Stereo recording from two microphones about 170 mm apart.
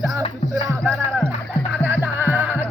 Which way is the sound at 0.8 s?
5° left (ahead or behind).